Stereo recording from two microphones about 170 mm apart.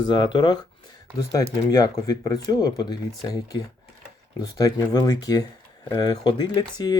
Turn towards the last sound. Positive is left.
turn(degrees=25)  # may be behind; listen again after turning